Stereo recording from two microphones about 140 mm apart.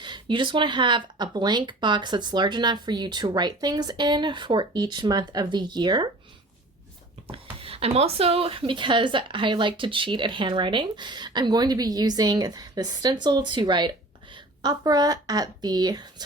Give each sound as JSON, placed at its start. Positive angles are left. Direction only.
{"t": 0.0, "sound": "speech", "side_deg": -35}
{"t": 7.6, "sound": "speech", "side_deg": -45}